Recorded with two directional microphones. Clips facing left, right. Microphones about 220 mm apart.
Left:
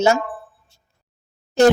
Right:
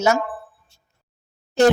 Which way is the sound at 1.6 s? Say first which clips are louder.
Left 2 dB; 45° left (ahead or behind).